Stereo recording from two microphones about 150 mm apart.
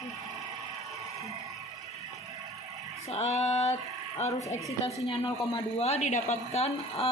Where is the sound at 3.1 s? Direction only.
45° left (ahead or behind).